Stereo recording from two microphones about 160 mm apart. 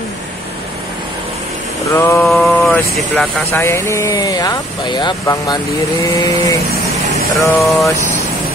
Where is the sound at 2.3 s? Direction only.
Centre (ahead or behind).